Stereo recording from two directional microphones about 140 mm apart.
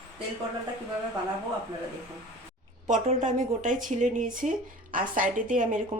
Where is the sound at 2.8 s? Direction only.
55° right (ahead or behind).